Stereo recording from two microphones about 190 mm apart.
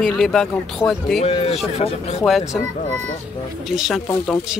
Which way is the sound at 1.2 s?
30° left (ahead or behind).